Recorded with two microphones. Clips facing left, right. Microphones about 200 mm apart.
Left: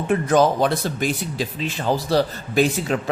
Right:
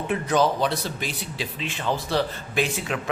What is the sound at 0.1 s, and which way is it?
Speech, 45° left (ahead or behind).